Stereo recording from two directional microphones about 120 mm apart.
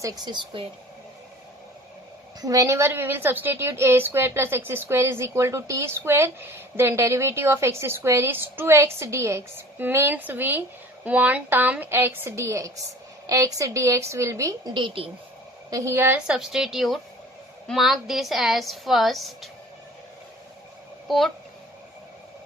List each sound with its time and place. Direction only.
0.0 s a woman's voice: 35° right (ahead or behind)
2.4 s a woman's voice: 30° right (ahead or behind)
14.7 s a woman's voice: 45° right (ahead or behind)
15.7 s a woman's voice: 25° right (ahead or behind)
16.2 s a woman's voice: 5° right (ahead or behind)
21.1 s a woman's voice: centre (ahead or behind)